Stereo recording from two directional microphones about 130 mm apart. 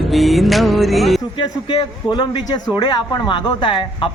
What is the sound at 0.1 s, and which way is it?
Music, centre (ahead or behind).